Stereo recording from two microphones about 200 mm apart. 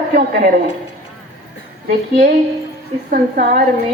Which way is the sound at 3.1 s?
45° right (ahead or behind).